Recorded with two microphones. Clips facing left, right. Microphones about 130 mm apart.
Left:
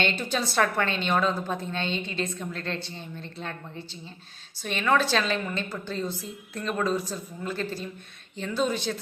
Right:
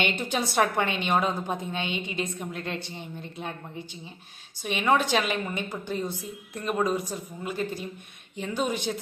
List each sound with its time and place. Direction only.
0.0 s a woman's voice: 15° right (ahead or behind)